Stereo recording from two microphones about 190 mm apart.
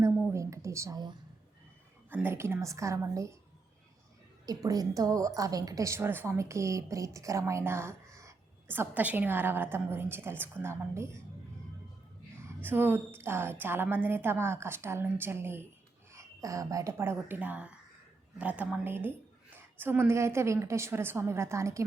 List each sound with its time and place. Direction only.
0.0 s a sound: 10° right (ahead or behind)
2.0 s a woman's voice: 10° right (ahead or behind)
4.4 s a woman's voice: 20° right (ahead or behind)
12.6 s a woman's voice: 10° right (ahead or behind)